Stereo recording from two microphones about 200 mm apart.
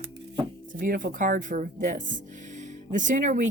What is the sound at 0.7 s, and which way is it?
Speech, 45° right (ahead or behind).